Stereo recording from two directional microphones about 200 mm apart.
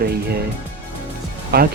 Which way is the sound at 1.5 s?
55° right (ahead or behind).